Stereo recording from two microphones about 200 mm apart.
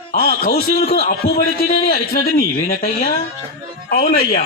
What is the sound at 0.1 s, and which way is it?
A man's voice, 50° left (ahead or behind).